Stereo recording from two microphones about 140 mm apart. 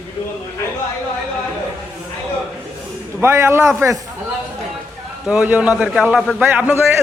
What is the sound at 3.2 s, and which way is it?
Speech, 20° right (ahead or behind).